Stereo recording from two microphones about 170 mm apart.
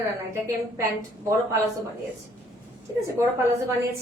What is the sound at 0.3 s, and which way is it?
Speech, 15° right (ahead or behind).